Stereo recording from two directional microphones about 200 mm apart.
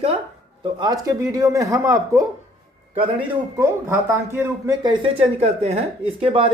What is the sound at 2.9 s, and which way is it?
Speech, 25° right (ahead or behind).